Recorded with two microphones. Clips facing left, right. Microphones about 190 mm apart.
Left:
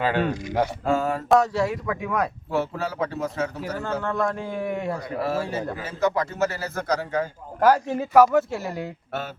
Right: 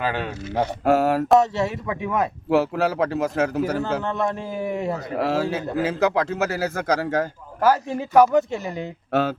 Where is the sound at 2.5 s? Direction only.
80° right.